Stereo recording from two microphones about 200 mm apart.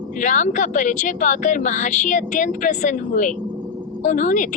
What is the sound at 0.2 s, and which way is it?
A woman's voice, 40° left (ahead or behind).